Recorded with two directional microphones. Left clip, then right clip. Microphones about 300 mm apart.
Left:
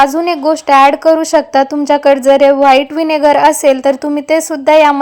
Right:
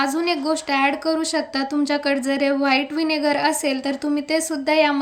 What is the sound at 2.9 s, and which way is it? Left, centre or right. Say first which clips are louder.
Speech: left 11 dB; left.